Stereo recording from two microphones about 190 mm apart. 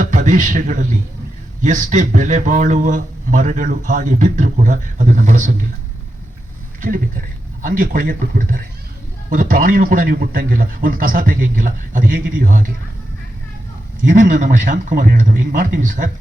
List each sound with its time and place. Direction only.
0.0 s a man's voice: 40° right (ahead or behind)
7.6 s a man's voice: 50° right (ahead or behind)
14.0 s a man's voice: 45° right (ahead or behind)